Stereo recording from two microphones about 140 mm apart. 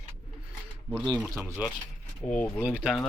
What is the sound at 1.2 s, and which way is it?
Speech, centre (ahead or behind).